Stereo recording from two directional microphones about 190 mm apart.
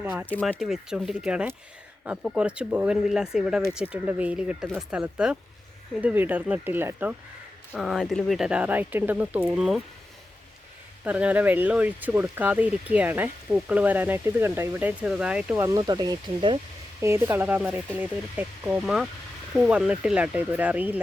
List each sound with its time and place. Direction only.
0.0 s speech: 10° right (ahead or behind)
0.3 s speech: 10° left (ahead or behind)
11.0 s speech: 5° right (ahead or behind); by 16.6 s 25° right (ahead or behind)
17.0 s speech: 15° right (ahead or behind)